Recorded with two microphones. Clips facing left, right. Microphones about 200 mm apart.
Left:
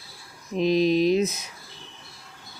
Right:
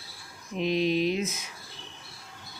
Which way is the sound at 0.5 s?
35° left (ahead or behind).